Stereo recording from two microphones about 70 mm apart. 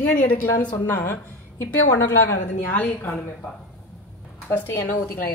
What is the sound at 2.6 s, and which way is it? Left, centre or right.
Speech, left.